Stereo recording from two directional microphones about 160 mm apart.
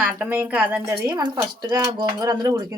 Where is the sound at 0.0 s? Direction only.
10° right (ahead or behind).